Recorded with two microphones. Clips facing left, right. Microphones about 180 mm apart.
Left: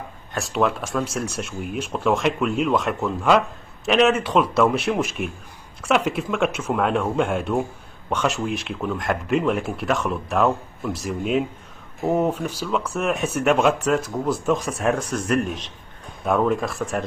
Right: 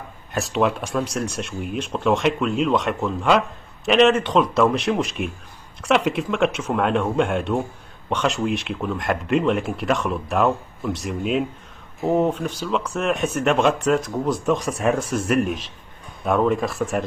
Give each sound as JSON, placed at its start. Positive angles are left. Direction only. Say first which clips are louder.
{"t": 0.3, "sound": "speech", "louder": "right 1 dB", "side_deg": 0}